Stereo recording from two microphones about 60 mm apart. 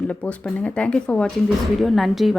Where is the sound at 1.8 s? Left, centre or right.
Centre.